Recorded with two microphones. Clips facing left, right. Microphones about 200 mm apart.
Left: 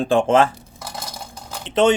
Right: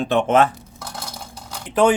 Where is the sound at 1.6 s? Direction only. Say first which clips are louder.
Even; 25° left (ahead or behind).